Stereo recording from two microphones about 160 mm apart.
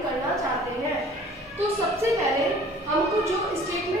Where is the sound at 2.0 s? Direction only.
20° right (ahead or behind).